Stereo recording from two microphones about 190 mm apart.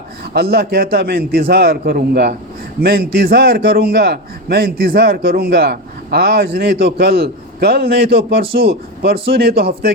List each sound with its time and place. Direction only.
0.3 s a man's voice: 55° right (ahead or behind)